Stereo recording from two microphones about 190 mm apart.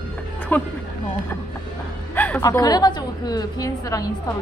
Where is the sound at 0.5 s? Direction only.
10° left (ahead or behind).